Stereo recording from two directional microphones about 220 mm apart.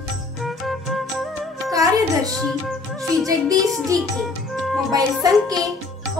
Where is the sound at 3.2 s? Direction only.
15° right (ahead or behind).